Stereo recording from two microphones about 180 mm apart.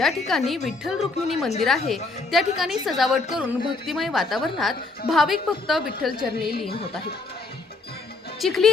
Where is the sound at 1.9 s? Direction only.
Centre (ahead or behind).